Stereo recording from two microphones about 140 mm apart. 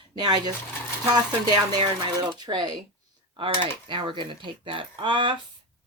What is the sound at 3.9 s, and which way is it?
Speech, 35° right (ahead or behind).